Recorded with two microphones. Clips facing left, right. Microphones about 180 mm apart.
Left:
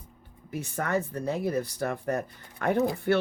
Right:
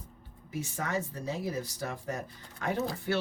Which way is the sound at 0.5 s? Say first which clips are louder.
Left 4 dB; 60° left (ahead or behind).